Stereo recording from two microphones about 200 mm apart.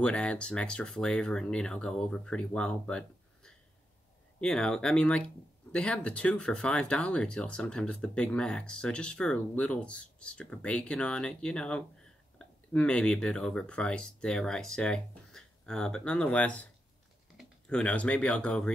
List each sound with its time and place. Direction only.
0.0 s speech: 5° left (ahead or behind)